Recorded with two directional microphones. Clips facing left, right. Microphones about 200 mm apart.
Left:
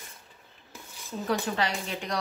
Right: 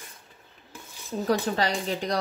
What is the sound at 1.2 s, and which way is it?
Speech, 40° right (ahead or behind).